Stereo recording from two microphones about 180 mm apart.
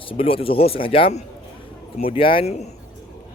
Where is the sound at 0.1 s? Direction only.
30° left (ahead or behind).